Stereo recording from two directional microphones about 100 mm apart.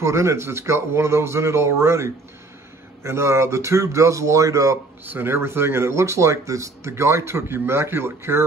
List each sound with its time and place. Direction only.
0.0 s speech: 30° right (ahead or behind)